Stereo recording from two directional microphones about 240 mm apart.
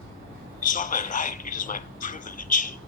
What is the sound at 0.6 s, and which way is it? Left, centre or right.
A man's voice, left.